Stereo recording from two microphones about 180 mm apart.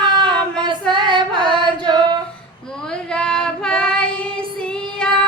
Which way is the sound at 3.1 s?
5° left (ahead or behind).